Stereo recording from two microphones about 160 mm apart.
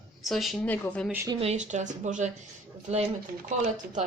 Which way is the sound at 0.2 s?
Centre (ahead or behind).